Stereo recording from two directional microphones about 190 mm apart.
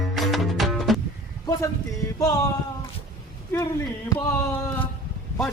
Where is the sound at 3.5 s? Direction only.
15° left (ahead or behind).